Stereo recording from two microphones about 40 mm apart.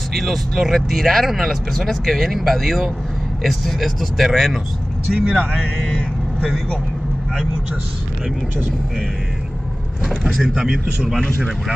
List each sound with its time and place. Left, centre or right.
0.1 s speech: centre
10.5 s a man's voice: centre